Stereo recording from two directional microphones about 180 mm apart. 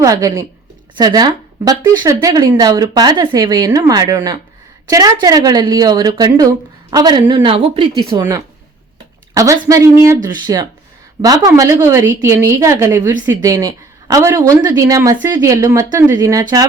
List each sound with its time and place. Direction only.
0.0 s a woman's voice: 20° right (ahead or behind)